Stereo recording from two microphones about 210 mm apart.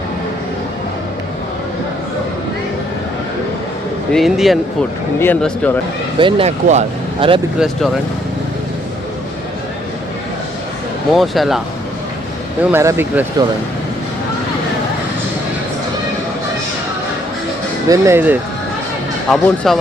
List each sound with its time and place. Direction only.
4.1 s speech: centre (ahead or behind)
6.1 s speech: 25° right (ahead or behind)
11.1 s speech: centre (ahead or behind)
12.7 s speech: 15° right (ahead or behind)
17.8 s speech: 15° right (ahead or behind)
19.3 s speech: centre (ahead or behind)